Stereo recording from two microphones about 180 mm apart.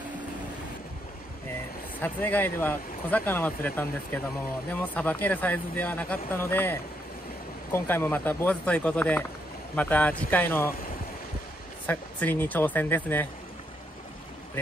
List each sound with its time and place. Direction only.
2.0 s speech: 10° left (ahead or behind)
11.8 s speech: 10° left (ahead or behind)